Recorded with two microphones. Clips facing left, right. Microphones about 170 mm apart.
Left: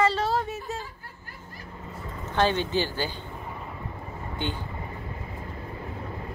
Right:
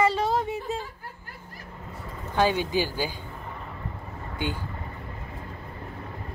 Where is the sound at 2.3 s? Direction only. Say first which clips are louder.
Right 1 dB; 10° right (ahead or behind).